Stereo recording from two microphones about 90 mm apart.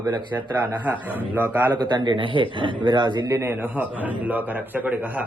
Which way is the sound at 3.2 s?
35° right (ahead or behind).